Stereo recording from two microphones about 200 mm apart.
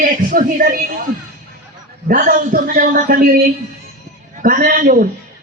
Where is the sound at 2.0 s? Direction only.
45° right (ahead or behind).